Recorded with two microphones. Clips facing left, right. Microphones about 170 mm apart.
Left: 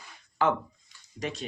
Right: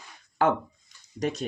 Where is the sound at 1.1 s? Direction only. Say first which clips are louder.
Right 6 dB; 40° right (ahead or behind).